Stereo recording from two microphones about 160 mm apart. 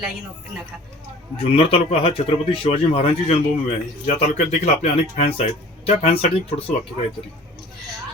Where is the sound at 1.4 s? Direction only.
35° left (ahead or behind).